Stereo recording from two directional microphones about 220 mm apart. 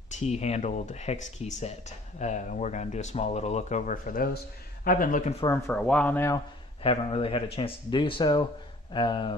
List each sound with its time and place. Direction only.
0.1 s speech: 30° left (ahead or behind)
5.4 s speech: 15° left (ahead or behind)
6.8 s speech: 25° left (ahead or behind)